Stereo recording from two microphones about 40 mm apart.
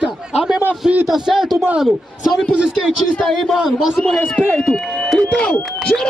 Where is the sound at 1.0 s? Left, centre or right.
Centre.